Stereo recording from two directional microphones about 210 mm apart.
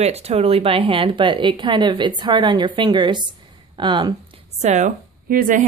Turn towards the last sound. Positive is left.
turn(degrees=-40)  # may be behind; listen again after turning